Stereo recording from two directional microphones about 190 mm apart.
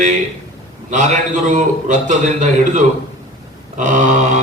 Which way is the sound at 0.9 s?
40° right (ahead or behind).